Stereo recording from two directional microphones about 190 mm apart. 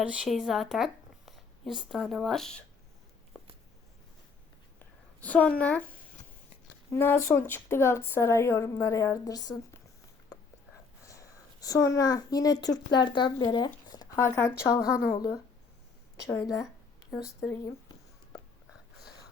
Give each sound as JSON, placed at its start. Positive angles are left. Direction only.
{"t": 0.0, "sound": "speech", "side_deg": 0}
{"t": 5.2, "sound": "speech", "side_deg": 5}
{"t": 6.9, "sound": "speech", "side_deg": 10}
{"t": 11.0, "sound": "speech", "side_deg": 15}
{"t": 13.9, "sound": "a sound", "side_deg": 20}
{"t": 15.1, "sound": "speech", "side_deg": 15}